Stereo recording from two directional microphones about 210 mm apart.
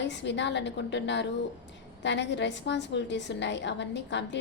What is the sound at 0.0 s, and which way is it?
A woman's voice, 55° left (ahead or behind).